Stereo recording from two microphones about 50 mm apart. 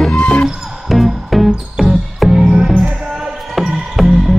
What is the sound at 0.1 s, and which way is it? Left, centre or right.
Music, left.